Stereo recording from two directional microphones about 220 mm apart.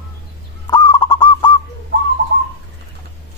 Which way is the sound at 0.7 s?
20° left (ahead or behind).